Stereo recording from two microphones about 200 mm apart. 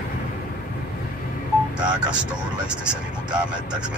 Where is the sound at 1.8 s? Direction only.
5° right (ahead or behind).